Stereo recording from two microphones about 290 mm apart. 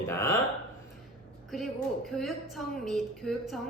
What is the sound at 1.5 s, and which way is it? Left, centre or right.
A woman's voice, centre.